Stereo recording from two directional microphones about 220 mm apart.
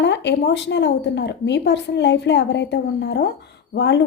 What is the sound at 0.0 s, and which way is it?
A woman's voice, 50° left (ahead or behind).